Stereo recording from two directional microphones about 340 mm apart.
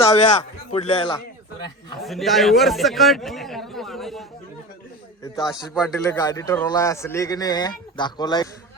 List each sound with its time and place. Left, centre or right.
0.0 s a man's voice: centre
2.0 s speech: centre
5.5 s speech: centre
5.8 s a man's voice: centre